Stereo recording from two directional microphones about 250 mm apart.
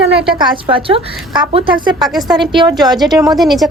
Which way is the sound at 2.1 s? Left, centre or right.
Centre.